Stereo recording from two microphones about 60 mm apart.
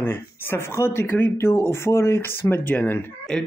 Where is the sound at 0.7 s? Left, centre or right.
Left.